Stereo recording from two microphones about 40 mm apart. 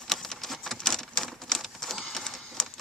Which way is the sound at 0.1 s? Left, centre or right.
Centre.